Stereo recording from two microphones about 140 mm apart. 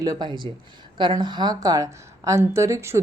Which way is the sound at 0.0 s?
30° right (ahead or behind).